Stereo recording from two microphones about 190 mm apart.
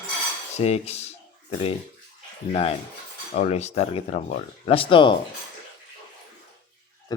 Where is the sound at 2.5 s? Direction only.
30° left (ahead or behind).